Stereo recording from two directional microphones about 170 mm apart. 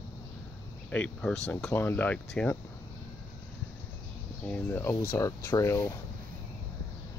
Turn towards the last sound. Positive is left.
turn(degrees=15)  # may be behind; listen again after turning